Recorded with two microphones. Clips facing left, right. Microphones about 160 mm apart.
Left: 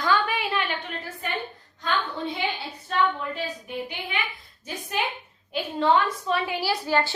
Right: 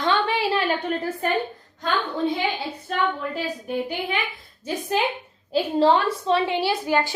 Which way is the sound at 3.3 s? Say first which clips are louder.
Right 5 dB; 40° right (ahead or behind).